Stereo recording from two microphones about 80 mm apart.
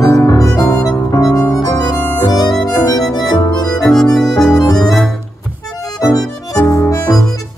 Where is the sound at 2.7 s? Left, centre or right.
Left.